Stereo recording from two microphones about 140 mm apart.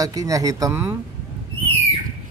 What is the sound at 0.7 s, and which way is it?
Speech, 15° right (ahead or behind).